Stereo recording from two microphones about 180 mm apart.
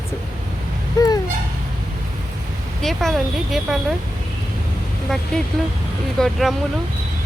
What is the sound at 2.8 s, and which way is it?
Speech, centre (ahead or behind).